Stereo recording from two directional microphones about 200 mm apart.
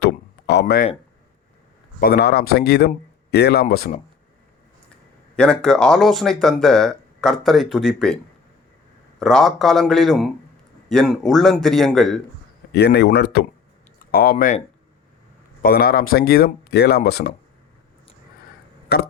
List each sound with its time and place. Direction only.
0.0 s a sound: 55° left (ahead or behind)
2.0 s speech: 50° left (ahead or behind)
5.4 s speech: 5° left (ahead or behind)
12.7 s speech: 55° left (ahead or behind)
15.6 s speech: 50° left (ahead or behind)
18.9 s speech: 50° left (ahead or behind)